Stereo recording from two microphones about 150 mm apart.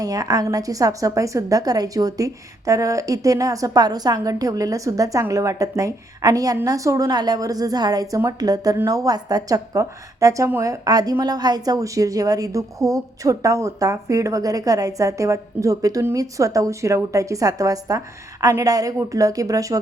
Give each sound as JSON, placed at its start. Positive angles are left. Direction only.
{"t": 0.0, "sound": "a woman's voice", "side_deg": -25}